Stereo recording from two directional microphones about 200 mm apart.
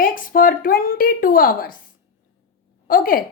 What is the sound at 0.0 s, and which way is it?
A woman's voice, 45° left (ahead or behind).